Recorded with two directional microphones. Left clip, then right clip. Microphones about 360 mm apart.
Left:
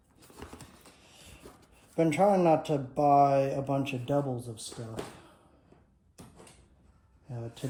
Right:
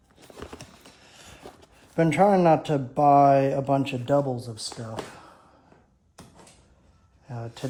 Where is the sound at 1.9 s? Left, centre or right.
Right.